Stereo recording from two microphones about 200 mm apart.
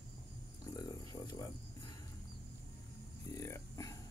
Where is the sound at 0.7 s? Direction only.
20° left (ahead or behind).